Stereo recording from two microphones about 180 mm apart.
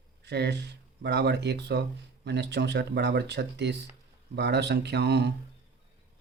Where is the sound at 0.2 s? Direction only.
70° right (ahead or behind).